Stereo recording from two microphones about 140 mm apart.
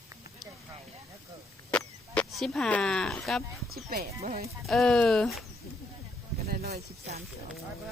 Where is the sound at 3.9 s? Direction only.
90° right.